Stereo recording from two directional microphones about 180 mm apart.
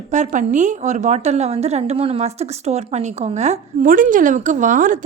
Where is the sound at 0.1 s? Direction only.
40° right (ahead or behind).